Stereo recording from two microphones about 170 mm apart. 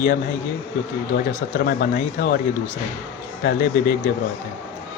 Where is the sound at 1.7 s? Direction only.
65° left (ahead or behind).